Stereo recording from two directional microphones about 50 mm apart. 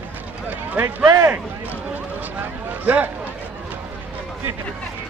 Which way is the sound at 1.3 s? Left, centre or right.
Right.